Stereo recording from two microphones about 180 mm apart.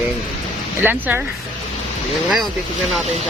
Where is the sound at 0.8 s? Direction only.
10° right (ahead or behind).